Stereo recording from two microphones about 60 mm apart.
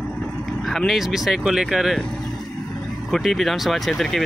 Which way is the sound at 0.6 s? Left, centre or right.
Centre.